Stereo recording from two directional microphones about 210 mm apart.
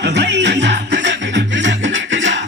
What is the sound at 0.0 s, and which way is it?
Music, 55° right (ahead or behind).